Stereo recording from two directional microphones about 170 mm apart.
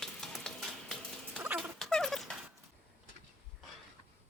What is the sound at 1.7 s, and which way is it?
Dog, 5° left (ahead or behind).